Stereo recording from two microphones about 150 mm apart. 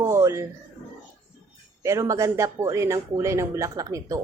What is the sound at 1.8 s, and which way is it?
Speech, 20° right (ahead or behind).